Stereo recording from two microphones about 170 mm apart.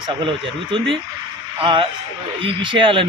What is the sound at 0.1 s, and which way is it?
A man's voice, 30° right (ahead or behind).